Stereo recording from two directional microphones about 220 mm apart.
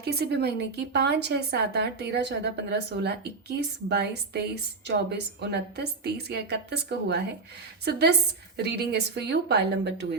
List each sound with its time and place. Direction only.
0.0 s a woman's voice: 45° right (ahead or behind)